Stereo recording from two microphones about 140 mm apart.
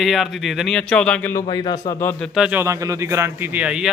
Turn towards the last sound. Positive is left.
turn(degrees=-5)  # may be behind; listen again after turning